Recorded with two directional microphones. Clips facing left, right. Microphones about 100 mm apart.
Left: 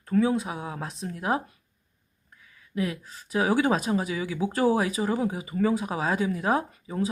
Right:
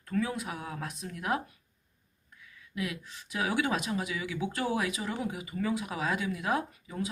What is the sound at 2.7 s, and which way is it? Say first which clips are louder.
Speech: left 6 dB; 40° left (ahead or behind).